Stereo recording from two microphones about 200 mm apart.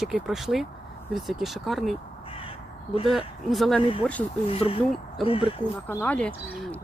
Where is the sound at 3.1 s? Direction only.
Centre (ahead or behind).